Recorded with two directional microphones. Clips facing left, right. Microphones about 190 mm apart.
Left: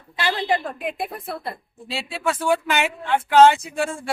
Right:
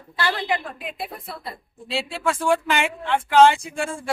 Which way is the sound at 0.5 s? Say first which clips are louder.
Left 4 dB; 50° left (ahead or behind).